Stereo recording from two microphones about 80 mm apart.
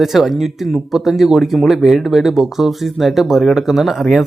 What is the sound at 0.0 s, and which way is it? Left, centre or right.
Speech, centre.